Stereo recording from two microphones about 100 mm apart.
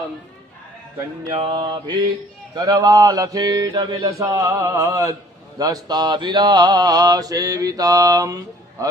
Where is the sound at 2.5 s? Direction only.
40° right (ahead or behind).